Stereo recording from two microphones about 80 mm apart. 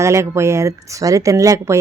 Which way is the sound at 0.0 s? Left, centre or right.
Right.